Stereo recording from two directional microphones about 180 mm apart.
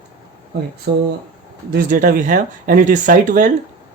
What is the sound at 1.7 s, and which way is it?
Speech, 50° right (ahead or behind).